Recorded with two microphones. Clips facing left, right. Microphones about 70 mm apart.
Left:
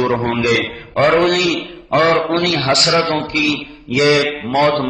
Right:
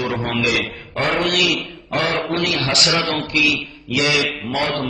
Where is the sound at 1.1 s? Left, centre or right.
Left.